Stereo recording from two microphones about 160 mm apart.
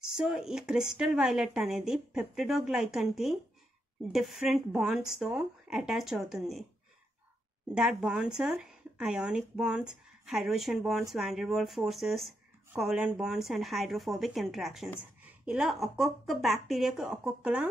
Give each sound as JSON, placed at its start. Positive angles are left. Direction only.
{"t": 0.1, "sound": "a woman's voice", "side_deg": -5}
{"t": 7.7, "sound": "a woman's voice", "side_deg": -5}